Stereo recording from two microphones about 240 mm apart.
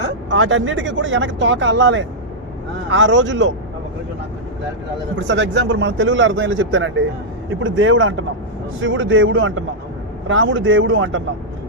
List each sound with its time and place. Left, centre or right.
0.3 s speech: right
5.1 s speech: right